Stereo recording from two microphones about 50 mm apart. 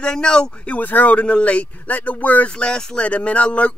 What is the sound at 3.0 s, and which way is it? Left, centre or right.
Speech, left.